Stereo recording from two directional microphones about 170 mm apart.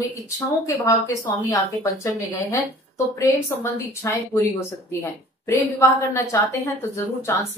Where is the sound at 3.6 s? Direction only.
15° left (ahead or behind).